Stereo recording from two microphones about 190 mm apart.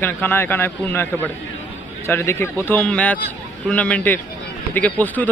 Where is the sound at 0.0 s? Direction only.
10° left (ahead or behind).